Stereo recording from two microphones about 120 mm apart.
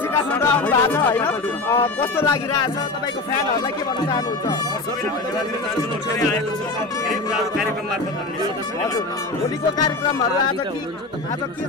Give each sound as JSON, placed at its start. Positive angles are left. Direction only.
{"t": 0.1, "sound": "speech", "side_deg": 20}
{"t": 7.1, "sound": "speech", "side_deg": -5}
{"t": 9.8, "sound": "speech", "side_deg": 30}